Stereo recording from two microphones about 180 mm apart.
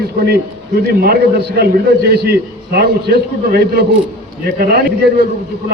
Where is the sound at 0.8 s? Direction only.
60° right (ahead or behind).